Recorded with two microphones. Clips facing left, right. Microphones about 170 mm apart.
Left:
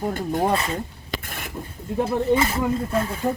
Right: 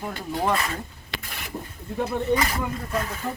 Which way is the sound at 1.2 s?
50° left (ahead or behind).